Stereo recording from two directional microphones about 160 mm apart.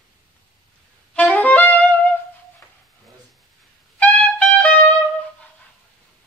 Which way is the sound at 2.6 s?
15° left (ahead or behind).